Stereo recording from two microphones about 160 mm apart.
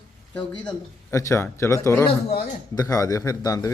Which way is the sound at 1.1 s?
15° left (ahead or behind).